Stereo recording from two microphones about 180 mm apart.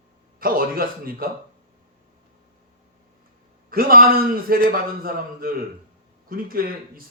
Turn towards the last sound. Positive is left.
turn(degrees=-55)  # may be behind; listen again after turning